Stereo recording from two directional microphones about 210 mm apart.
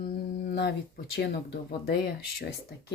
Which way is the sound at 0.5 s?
50° left (ahead or behind).